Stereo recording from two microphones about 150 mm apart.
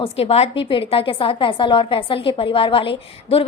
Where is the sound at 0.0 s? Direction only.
40° left (ahead or behind).